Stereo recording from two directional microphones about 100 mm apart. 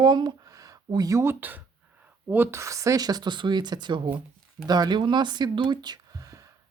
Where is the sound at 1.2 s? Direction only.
20° right (ahead or behind).